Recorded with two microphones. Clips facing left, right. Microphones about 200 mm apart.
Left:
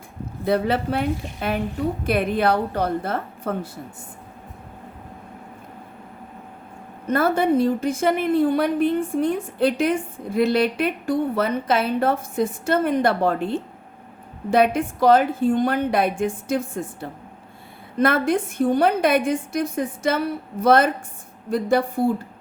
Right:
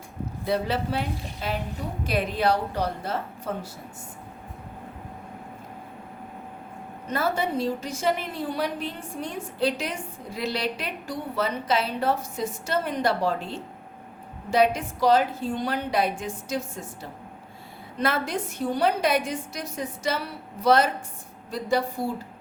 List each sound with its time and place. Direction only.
0.4 s a woman's voice: 55° left (ahead or behind)
7.1 s a woman's voice: 55° left (ahead or behind)